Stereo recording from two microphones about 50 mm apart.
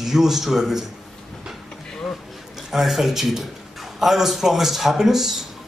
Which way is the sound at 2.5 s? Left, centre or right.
Centre.